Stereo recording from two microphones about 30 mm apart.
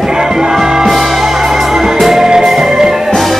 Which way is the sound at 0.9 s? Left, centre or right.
Centre.